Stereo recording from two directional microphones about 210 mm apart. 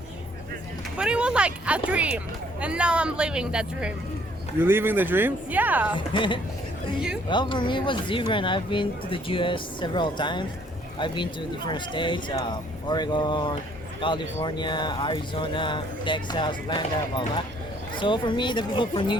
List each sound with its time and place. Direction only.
0.9 s speech: 5° right (ahead or behind)
6.1 s speech: 25° left (ahead or behind)